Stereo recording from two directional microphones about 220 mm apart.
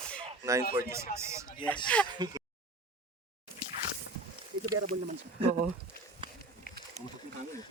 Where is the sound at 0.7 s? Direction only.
10° right (ahead or behind).